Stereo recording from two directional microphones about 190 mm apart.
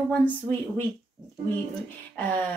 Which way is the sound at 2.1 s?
5° left (ahead or behind).